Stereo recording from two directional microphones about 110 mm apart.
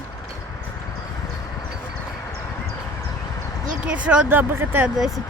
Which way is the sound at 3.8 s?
10° right (ahead or behind).